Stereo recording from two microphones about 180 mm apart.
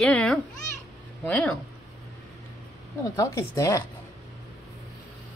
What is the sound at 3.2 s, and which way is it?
Speech, 15° left (ahead or behind).